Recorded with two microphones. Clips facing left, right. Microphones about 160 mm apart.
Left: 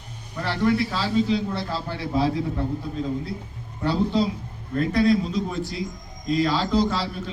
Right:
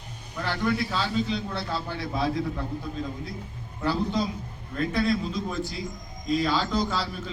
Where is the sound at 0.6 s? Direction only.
Centre (ahead or behind).